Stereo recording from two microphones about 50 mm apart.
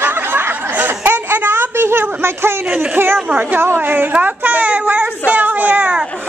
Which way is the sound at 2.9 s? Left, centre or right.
Right.